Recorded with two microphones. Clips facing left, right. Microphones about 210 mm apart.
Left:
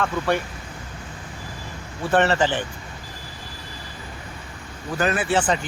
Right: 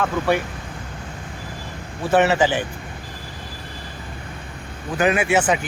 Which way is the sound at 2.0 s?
10° right (ahead or behind).